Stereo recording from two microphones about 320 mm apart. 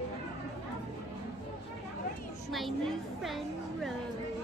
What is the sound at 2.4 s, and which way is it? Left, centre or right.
Speech, centre.